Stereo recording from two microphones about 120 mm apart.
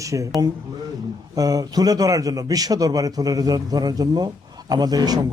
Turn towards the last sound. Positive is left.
turn(degrees=-35)  # may be behind; listen again after turning